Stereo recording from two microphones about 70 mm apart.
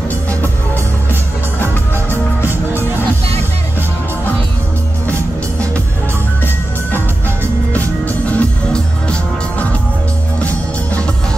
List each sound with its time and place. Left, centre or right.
2.4 s music: right
7.7 s music: left